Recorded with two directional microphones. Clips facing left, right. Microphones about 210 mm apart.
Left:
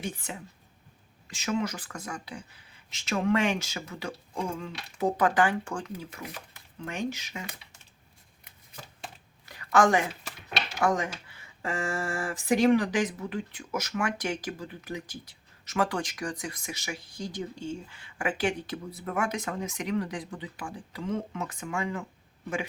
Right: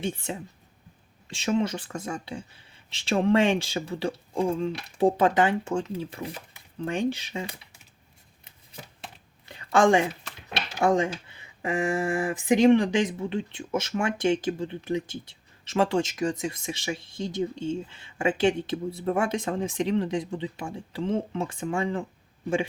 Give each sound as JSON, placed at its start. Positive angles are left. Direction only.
{"t": 0.0, "sound": "speech", "side_deg": -25}
{"t": 9.5, "sound": "a sound", "side_deg": -25}
{"t": 10.8, "sound": "speech", "side_deg": -25}